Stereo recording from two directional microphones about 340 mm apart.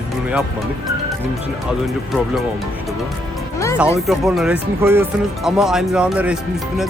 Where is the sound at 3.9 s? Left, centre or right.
Centre.